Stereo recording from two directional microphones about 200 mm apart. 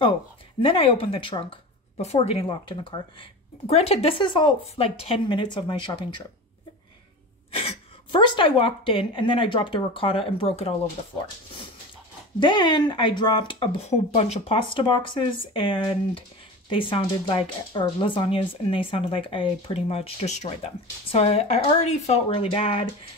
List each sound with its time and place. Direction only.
0.6 s speech: 25° left (ahead or behind)
7.5 s speech: 25° left (ahead or behind)
12.4 s speech: 25° left (ahead or behind)